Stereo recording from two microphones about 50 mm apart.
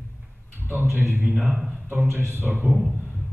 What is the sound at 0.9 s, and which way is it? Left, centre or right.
Speech, right.